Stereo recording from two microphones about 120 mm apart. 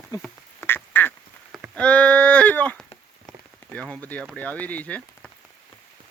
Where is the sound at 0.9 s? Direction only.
15° left (ahead or behind).